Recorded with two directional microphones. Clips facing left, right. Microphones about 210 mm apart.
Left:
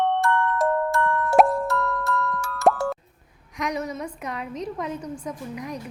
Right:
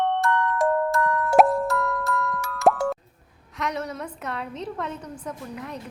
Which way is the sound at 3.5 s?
10° left (ahead or behind).